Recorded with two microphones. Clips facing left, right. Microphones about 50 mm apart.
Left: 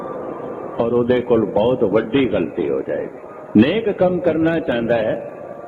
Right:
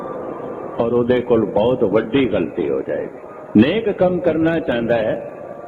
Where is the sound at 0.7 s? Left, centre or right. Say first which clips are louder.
Even; centre.